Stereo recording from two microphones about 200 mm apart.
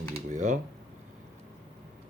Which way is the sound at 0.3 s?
35° right (ahead or behind).